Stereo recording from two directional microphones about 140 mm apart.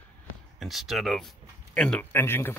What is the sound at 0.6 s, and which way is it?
Speech, centre (ahead or behind).